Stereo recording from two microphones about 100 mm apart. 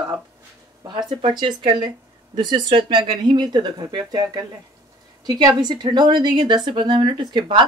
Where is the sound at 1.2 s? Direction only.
60° right (ahead or behind).